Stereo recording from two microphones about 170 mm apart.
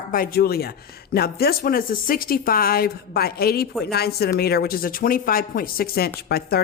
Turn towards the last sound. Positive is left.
turn(degrees=65)  # may be behind; listen again after turning